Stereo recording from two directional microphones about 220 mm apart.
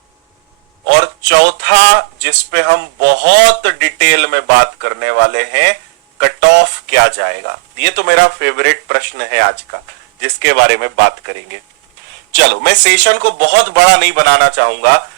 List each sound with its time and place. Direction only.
0.9 s speech: 50° right (ahead or behind)
12.3 s speech: 50° right (ahead or behind)